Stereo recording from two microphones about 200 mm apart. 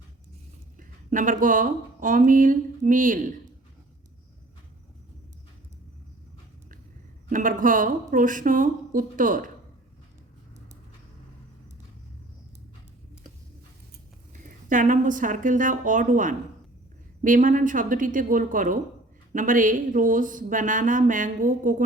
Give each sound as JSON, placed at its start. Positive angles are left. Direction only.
{"t": 0.8, "sound": "speech", "side_deg": -40}
{"t": 7.3, "sound": "speech", "side_deg": -40}
{"t": 14.4, "sound": "speech", "side_deg": -40}